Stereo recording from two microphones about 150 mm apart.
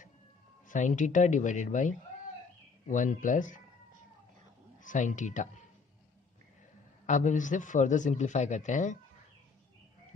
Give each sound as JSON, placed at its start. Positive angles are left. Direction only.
{"t": 0.7, "sound": "a man's voice", "side_deg": 55}
{"t": 4.8, "sound": "a man's voice", "side_deg": 55}
{"t": 7.1, "sound": "a man's voice", "side_deg": 55}